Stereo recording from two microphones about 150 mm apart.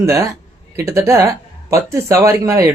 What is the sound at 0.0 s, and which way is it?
Speech, 20° right (ahead or behind).